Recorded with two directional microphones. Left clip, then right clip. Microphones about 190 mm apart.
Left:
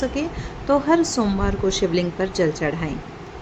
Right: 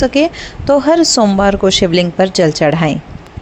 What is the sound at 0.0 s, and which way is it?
A woman's voice, 45° right (ahead or behind).